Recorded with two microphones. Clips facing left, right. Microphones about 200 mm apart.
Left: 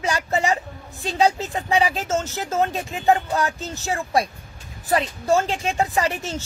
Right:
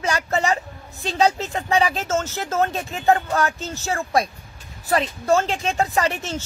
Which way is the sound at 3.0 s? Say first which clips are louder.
Right 1 dB; 15° left (ahead or behind).